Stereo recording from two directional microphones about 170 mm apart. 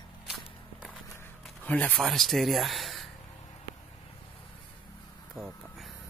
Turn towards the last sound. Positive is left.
turn(degrees=0)  # may be behind; listen again after turning